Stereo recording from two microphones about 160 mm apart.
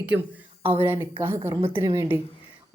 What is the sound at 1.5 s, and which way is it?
Speech, 35° right (ahead or behind).